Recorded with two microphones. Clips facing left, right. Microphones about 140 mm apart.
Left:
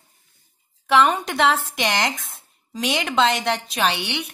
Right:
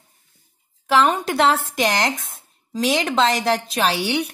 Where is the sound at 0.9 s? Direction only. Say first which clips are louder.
Even; centre (ahead or behind).